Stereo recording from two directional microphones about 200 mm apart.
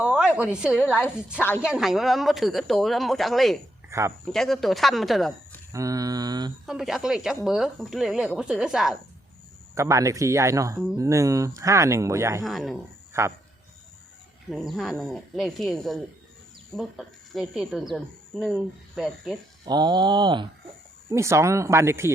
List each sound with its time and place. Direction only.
0.0 s a sound: 5° right (ahead or behind)
0.5 s speech: 5° right (ahead or behind)
1.4 s speech: 10° left (ahead or behind)
1.6 s speech: 5° right (ahead or behind)
3.8 s a sound: 15° right (ahead or behind)
4.3 s speech: centre (ahead or behind)
5.7 s speech: 15° right (ahead or behind)
6.7 s speech: centre (ahead or behind)
9.7 s speech: 15° right (ahead or behind)
12.5 s speech: centre (ahead or behind)
13.2 s speech: 15° right (ahead or behind)
14.5 s speech: centre (ahead or behind)
19.6 s speech: 20° right (ahead or behind)